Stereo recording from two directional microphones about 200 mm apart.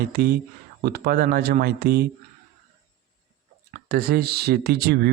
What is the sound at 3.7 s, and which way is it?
Speech, 50° right (ahead or behind).